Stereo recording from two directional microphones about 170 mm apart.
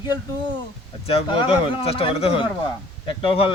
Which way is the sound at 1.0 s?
35° left (ahead or behind).